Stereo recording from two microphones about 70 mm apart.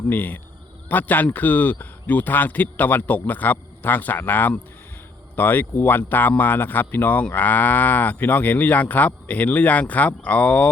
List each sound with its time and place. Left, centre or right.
0.1 s speech: left